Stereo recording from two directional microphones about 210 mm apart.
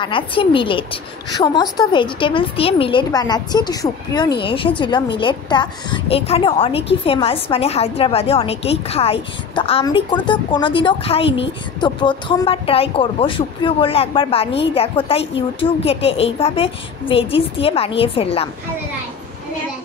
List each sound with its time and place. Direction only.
0.0 s a woman's voice: 25° left (ahead or behind)
11.2 s a woman's voice: 60° left (ahead or behind)
11.8 s a woman's voice: 20° left (ahead or behind)